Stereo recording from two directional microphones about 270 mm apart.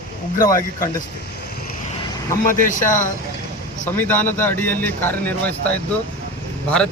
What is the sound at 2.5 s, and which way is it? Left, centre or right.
Speech, left.